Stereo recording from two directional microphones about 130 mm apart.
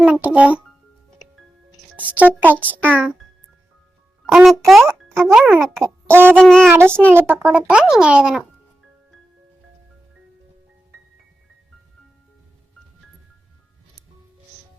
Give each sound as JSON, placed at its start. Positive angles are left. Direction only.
{"t": 0.0, "sound": "a child's voice", "side_deg": -10}
{"t": 2.0, "sound": "speech", "side_deg": -10}
{"t": 4.4, "sound": "a child's voice", "side_deg": 0}
{"t": 5.8, "sound": "a sound", "side_deg": -15}
{"t": 6.3, "sound": "child singing", "side_deg": 5}
{"t": 6.7, "sound": "speech", "side_deg": -15}